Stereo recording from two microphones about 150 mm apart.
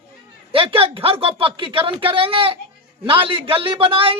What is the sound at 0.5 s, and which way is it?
A man's voice, 35° right (ahead or behind).